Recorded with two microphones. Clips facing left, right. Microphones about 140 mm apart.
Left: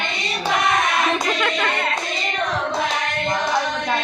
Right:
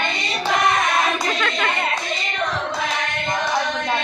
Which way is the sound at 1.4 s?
10° left (ahead or behind).